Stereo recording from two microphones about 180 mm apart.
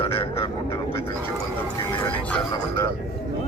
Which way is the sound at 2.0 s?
10° left (ahead or behind).